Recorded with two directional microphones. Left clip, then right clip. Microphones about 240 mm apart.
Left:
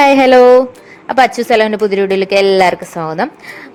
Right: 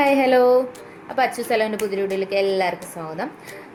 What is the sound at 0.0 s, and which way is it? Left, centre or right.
A woman's voice, left.